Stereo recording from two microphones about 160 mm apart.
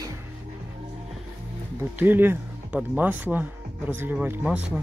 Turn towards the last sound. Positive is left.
turn(degrees=-10)  # may be behind; listen again after turning